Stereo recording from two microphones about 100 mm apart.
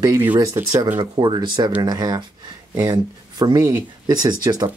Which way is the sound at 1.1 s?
50° right (ahead or behind).